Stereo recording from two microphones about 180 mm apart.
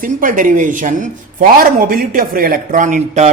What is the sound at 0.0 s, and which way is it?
A man's voice, 50° right (ahead or behind).